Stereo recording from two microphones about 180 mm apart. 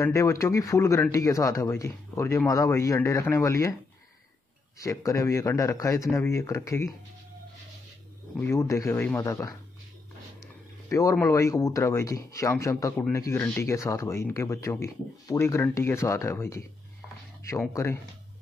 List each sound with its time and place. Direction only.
0.0 s speech: 15° left (ahead or behind)
4.7 s speech: 15° left (ahead or behind)
8.4 s speech: 15° left (ahead or behind)